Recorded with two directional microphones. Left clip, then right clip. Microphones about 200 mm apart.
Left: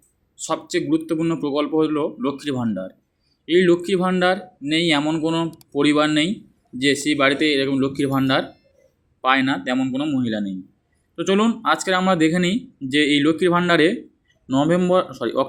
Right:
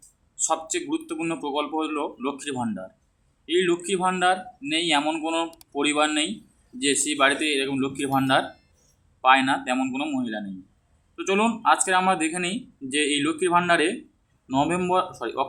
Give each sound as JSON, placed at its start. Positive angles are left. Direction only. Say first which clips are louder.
{"t": 0.3, "sound": "speech", "louder": "left 2 dB", "side_deg": 15}